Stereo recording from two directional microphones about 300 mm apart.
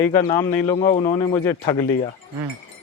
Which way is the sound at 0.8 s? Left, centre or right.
Left.